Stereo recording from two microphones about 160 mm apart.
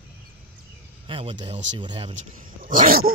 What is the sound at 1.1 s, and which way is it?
Speech, 35° right (ahead or behind).